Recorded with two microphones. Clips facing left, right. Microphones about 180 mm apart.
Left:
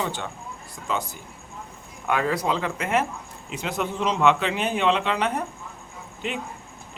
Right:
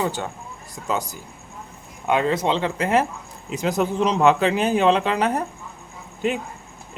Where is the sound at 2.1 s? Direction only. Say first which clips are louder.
Right 4 dB; 25° right (ahead or behind); by 5.4 s 40° right (ahead or behind).